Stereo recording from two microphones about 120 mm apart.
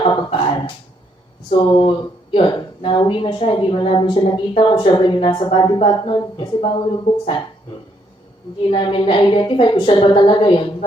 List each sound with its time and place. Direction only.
0.0 s a sound: 45° left (ahead or behind)
1.5 s a woman's voice: 45° left (ahead or behind)
8.7 s a woman's voice: 45° left (ahead or behind)